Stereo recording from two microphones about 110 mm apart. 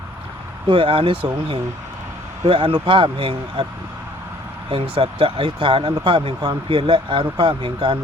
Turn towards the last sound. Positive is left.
turn(degrees=-55)  # may be behind; listen again after turning